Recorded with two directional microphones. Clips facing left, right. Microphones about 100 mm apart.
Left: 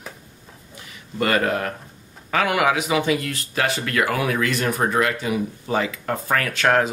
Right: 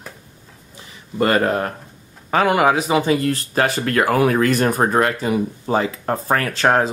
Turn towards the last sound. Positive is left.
turn(degrees=-35)  # may be behind; listen again after turning